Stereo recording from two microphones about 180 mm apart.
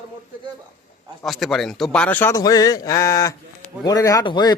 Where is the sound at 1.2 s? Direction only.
Centre (ahead or behind).